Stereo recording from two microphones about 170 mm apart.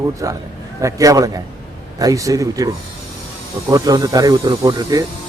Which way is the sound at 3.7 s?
20° right (ahead or behind).